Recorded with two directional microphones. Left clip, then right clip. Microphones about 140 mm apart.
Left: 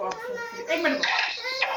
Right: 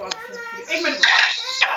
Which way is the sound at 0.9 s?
Centre (ahead or behind).